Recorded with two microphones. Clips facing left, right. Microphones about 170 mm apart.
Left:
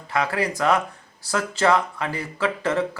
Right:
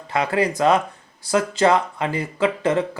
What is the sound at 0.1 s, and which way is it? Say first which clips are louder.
Speech: right 3 dB; 25° right (ahead or behind).